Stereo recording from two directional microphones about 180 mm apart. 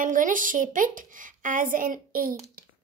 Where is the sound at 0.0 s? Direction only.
50° right (ahead or behind).